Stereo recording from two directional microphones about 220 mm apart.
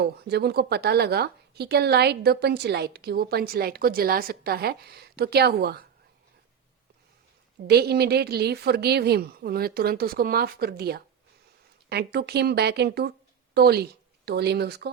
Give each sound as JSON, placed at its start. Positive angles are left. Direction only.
{"t": 0.0, "sound": "a woman's voice", "side_deg": -50}
{"t": 7.7, "sound": "a woman's voice", "side_deg": -45}